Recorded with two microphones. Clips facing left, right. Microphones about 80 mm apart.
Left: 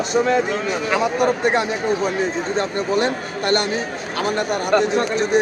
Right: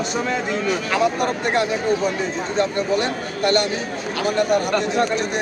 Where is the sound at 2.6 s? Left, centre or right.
Left.